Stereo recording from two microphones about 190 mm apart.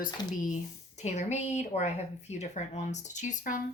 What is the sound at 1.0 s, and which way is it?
Speech, 35° left (ahead or behind).